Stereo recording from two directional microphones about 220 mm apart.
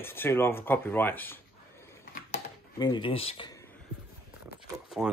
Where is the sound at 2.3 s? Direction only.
20° left (ahead or behind).